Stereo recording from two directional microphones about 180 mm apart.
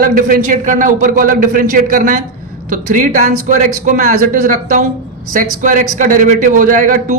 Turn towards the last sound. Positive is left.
turn(degrees=-45)  # may be behind; listen again after turning